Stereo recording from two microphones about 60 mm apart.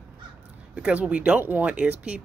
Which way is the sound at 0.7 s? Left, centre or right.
Centre.